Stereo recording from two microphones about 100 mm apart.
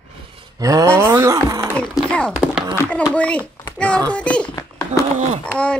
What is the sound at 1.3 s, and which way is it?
Speech, 35° right (ahead or behind).